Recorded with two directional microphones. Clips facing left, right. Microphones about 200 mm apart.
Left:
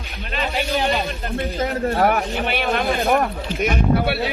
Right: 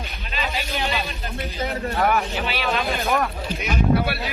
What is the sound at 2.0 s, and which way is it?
Speech, 40° left (ahead or behind).